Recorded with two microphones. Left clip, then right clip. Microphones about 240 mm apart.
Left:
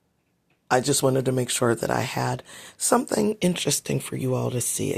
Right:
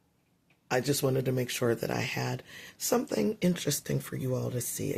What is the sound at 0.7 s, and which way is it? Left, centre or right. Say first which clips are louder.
Speech: left 7 dB; left.